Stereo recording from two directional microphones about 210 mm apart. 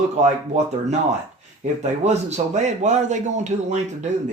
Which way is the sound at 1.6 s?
35° right (ahead or behind).